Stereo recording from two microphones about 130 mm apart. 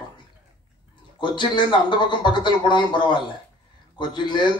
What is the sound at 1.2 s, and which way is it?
A man's voice, 35° left (ahead or behind).